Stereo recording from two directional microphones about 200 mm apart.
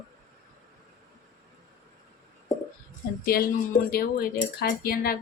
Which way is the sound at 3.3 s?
50° left (ahead or behind).